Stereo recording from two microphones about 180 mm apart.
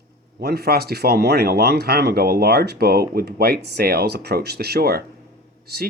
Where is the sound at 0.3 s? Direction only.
60° right (ahead or behind).